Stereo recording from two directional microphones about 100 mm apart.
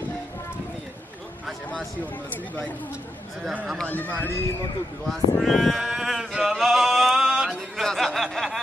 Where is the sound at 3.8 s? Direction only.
15° left (ahead or behind).